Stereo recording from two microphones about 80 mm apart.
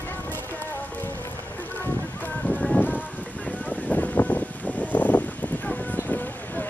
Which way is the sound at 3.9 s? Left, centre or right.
Centre.